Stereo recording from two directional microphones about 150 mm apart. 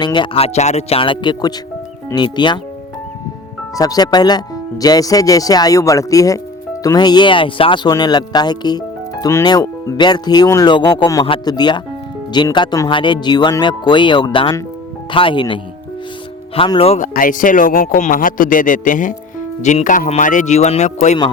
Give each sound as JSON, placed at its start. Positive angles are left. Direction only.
{"t": 0.0, "sound": "speech", "side_deg": 30}
{"t": 3.8, "sound": "speech", "side_deg": 25}
{"t": 17.0, "sound": "speech", "side_deg": 65}